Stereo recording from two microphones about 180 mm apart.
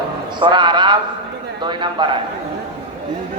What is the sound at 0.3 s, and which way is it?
Speech, 25° right (ahead or behind).